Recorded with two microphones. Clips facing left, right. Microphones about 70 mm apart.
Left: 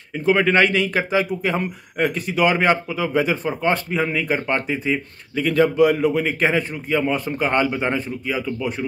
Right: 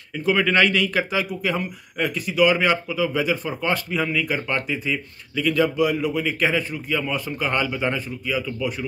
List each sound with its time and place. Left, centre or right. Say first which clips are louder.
0.1 s speech: left 3 dB; left